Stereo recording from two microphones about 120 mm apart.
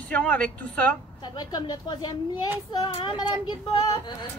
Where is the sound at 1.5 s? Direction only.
35° left (ahead or behind).